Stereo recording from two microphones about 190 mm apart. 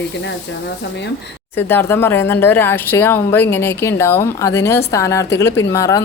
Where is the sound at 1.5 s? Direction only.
10° left (ahead or behind).